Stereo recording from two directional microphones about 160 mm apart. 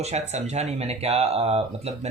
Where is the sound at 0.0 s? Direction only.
45° right (ahead or behind).